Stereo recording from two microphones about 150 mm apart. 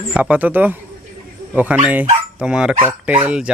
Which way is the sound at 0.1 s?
10° right (ahead or behind).